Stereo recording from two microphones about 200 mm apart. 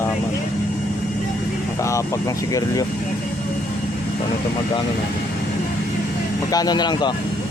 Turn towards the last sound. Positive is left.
turn(degrees=20)  # may be behind; listen again after turning